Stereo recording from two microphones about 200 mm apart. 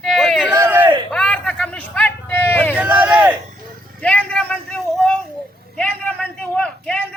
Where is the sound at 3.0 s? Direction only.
5° right (ahead or behind).